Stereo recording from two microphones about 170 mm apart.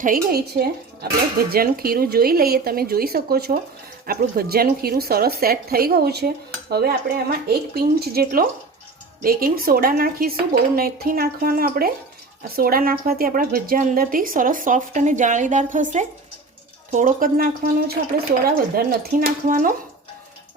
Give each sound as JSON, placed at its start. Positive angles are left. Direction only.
{"t": 0.0, "sound": "a woman's voice", "side_deg": -60}